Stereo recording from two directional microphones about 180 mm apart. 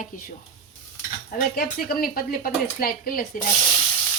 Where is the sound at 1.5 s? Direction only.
55° left (ahead or behind).